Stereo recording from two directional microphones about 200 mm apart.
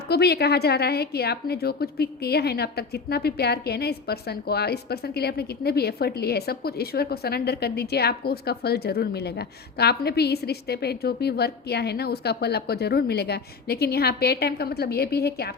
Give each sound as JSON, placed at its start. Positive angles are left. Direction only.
{"t": 0.1, "sound": "a woman's voice", "side_deg": 55}